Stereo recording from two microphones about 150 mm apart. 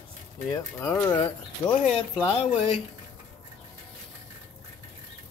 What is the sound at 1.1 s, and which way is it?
Speech, 30° left (ahead or behind).